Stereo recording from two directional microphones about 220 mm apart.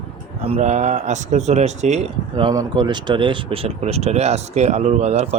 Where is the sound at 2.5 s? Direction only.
20° right (ahead or behind).